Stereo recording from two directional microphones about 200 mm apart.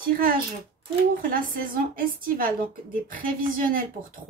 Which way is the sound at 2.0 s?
45° right (ahead or behind).